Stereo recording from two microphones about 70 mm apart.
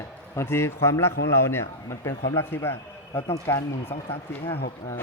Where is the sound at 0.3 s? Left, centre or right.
Left.